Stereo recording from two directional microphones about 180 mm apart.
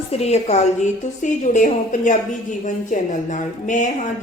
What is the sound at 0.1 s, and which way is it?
A woman's voice, 35° left (ahead or behind).